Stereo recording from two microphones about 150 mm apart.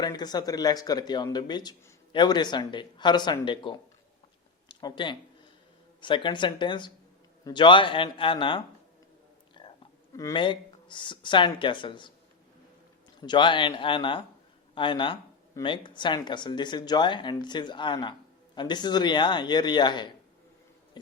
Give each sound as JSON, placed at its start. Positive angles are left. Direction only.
{"t": 0.0, "sound": "speech", "side_deg": 25}
{"t": 9.6, "sound": "whispering", "side_deg": 30}
{"t": 10.1, "sound": "speech", "side_deg": 25}
{"t": 13.2, "sound": "speech", "side_deg": 30}